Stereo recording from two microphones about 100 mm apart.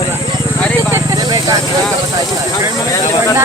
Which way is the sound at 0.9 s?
40° right (ahead or behind).